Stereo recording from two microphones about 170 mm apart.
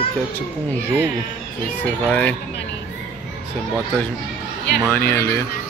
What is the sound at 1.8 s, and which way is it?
Speech, 5° left (ahead or behind).